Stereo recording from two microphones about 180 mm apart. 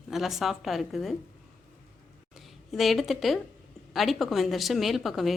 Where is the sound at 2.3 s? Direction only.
Centre (ahead or behind).